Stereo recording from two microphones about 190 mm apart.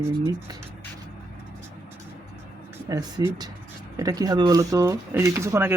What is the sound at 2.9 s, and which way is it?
Speech, 20° right (ahead or behind).